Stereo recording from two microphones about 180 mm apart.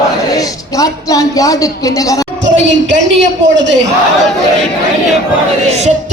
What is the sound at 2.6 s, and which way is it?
A man's voice, 85° right.